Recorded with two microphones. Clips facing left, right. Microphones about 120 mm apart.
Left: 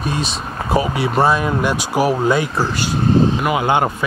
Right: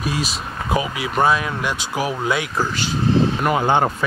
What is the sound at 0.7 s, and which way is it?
Speech, 40° left (ahead or behind).